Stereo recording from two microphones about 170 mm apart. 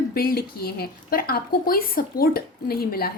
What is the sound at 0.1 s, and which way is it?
A woman's voice, 60° left (ahead or behind).